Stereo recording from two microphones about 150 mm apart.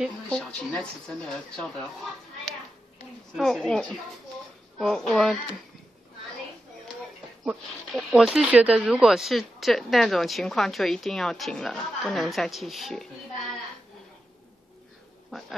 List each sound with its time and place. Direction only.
0.0 s speech: 5° left (ahead or behind)
3.3 s speech: centre (ahead or behind)
7.4 s speech: 5° right (ahead or behind)
15.3 s speech: 5° left (ahead or behind)